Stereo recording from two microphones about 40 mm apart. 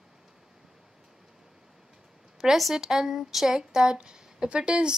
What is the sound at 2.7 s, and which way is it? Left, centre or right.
A woman's voice, centre.